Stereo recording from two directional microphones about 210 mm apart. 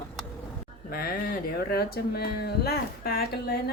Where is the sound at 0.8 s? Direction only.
45° left (ahead or behind).